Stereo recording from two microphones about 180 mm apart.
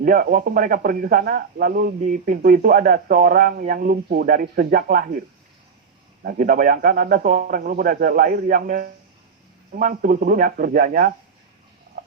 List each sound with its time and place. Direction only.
0.0 s speech: 50° right (ahead or behind)
6.2 s speech: 50° right (ahead or behind)
11.9 s a sound: 65° right (ahead or behind)